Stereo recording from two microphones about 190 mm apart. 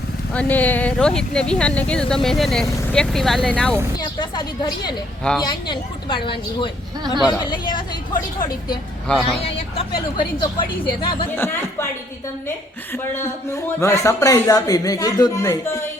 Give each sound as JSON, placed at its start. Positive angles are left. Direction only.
{"t": 0.3, "sound": "speech", "side_deg": 10}
{"t": 3.9, "sound": "speech", "side_deg": 25}
{"t": 9.1, "sound": "speech", "side_deg": 5}
{"t": 9.7, "sound": "speech", "side_deg": 25}
{"t": 11.3, "sound": "speech", "side_deg": 15}
{"t": 12.9, "sound": "speech", "side_deg": 10}